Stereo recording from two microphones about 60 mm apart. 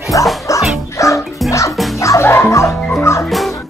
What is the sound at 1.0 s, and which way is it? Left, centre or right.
Bow-wow, left.